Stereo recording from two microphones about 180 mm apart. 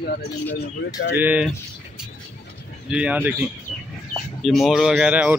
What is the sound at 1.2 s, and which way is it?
Speech, 10° right (ahead or behind).